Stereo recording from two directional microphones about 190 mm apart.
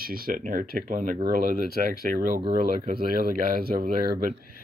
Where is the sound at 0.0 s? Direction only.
50° right (ahead or behind).